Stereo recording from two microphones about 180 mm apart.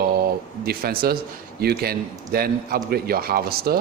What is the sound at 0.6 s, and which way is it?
A man's voice, 55° right (ahead or behind).